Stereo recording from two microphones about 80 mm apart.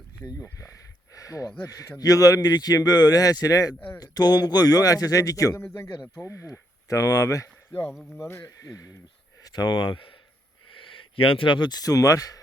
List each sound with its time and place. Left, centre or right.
0.3 s a man's voice: left
1.1 s a sound: left
1.6 s a man's voice: left
3.8 s speech: left
4.0 s a man's voice: left
5.5 s speech: left
6.3 s speech: left
7.9 s speech: centre
8.2 s speech: left
8.4 s a man's voice: left
9.4 s speech: left
10.8 s a sound: left
11.8 s a man's voice: left